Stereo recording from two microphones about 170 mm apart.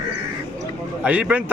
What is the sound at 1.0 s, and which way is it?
Speech, 5° right (ahead or behind).